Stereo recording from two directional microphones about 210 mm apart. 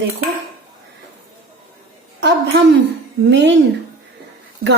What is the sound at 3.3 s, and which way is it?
Speech, 55° right (ahead or behind).